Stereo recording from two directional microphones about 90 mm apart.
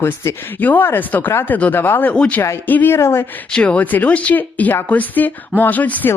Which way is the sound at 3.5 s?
10° left (ahead or behind).